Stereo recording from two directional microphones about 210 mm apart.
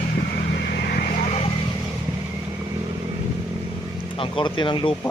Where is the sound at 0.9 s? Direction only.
40° left (ahead or behind).